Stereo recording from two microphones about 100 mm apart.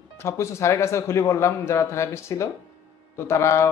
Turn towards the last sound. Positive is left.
turn(degrees=30)  # may be behind; listen again after turning